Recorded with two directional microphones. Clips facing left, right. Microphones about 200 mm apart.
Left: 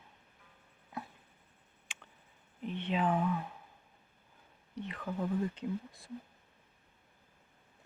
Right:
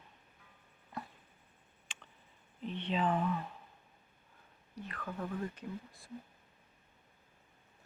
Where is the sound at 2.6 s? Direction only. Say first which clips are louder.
Left 1 dB; 10° left (ahead or behind).